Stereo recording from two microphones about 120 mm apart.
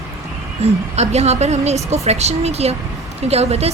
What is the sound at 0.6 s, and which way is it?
A woman's voice, 65° right (ahead or behind).